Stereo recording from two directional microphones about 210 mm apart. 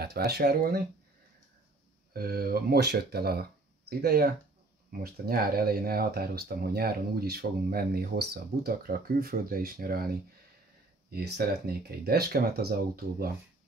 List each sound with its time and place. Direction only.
0.0 s speech: 50° right (ahead or behind)
2.1 s speech: 45° right (ahead or behind)
11.1 s speech: 50° right (ahead or behind)